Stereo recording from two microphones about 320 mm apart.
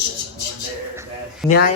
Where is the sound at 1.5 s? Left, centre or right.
Left.